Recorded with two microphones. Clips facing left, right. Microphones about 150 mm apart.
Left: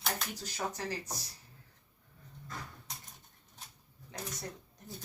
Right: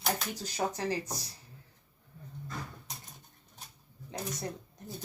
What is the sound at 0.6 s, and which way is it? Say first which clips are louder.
Speech: right 5 dB; 40° right (ahead or behind).